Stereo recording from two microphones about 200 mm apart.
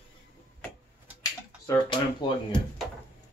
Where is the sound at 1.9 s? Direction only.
25° left (ahead or behind).